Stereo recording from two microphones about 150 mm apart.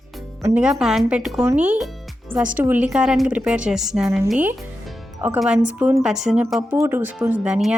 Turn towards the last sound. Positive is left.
turn(degrees=-5)  # may be behind; listen again after turning